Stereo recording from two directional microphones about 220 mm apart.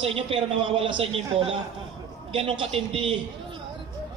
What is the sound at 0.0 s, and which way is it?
A man's voice, 25° right (ahead or behind).